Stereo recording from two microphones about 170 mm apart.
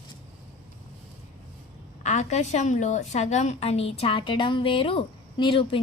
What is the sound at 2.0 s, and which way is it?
A woman's voice, 45° left (ahead or behind).